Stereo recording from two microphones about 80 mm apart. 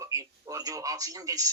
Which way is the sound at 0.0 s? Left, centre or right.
Right.